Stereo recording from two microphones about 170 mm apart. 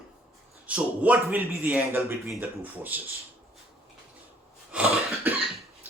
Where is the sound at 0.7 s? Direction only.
10° right (ahead or behind).